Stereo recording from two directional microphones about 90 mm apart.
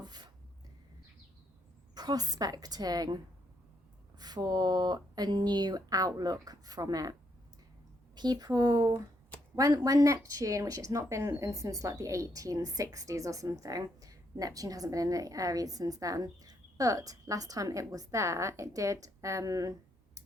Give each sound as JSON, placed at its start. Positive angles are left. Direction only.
{"t": 0.0, "sound": "chopping", "side_deg": -50}
{"t": 2.0, "sound": "speech", "side_deg": -45}
{"t": 4.2, "sound": "speech", "side_deg": -50}